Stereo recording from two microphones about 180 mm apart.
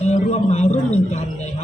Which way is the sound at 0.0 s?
40° left (ahead or behind).